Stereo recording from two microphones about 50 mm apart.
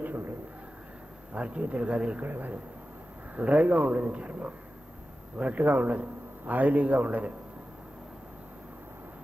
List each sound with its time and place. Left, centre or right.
0.0 s a sound: right
1.3 s a man's voice: right
2.2 s a man's voice: right